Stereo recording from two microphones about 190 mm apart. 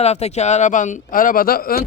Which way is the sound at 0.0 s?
35° left (ahead or behind).